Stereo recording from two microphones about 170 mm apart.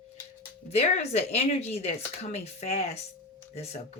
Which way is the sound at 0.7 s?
40° left (ahead or behind).